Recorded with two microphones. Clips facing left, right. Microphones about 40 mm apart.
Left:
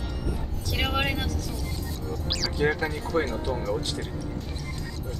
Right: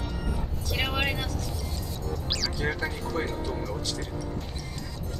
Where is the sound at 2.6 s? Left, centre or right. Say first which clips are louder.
Left 7 dB; left.